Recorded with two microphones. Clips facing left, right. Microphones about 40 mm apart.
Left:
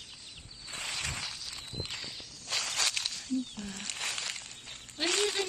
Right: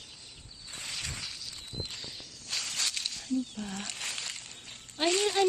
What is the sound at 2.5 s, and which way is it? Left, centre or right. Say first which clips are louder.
Walk: left 2 dB; left.